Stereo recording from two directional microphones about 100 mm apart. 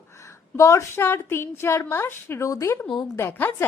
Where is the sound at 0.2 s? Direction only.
30° left (ahead or behind).